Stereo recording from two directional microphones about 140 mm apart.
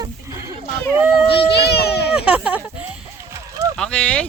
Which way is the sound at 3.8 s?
10° left (ahead or behind).